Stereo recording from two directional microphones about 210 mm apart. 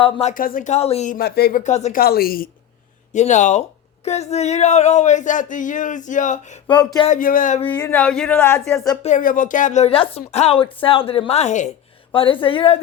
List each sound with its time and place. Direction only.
0.0 s speech: 30° left (ahead or behind)
6.7 s a woman's voice: 20° left (ahead or behind)
7.1 s speech: 40° left (ahead or behind)
7.8 s speech: 10° left (ahead or behind)
9.0 s a woman's voice: 40° left (ahead or behind)